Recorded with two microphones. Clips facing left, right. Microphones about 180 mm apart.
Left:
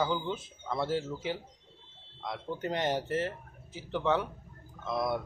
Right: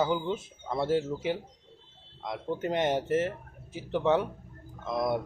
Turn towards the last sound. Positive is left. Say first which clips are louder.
# right 3 dB
turn(degrees=-20)  # may be behind; listen again after turning